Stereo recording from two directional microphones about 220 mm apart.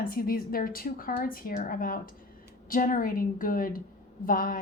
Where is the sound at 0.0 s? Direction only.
40° left (ahead or behind).